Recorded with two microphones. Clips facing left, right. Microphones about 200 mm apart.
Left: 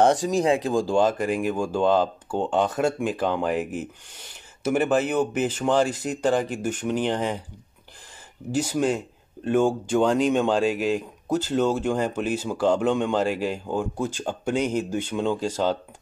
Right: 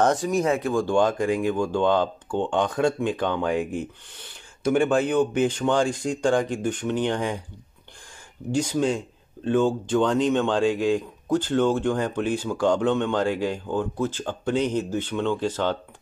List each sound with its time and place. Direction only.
0.2 s speech: 25° left (ahead or behind)
0.9 s speech: 5° left (ahead or behind)
8.5 s speech: 5° left (ahead or behind)